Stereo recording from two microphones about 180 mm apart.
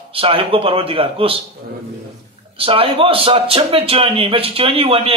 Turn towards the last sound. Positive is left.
turn(degrees=-30)  # may be behind; listen again after turning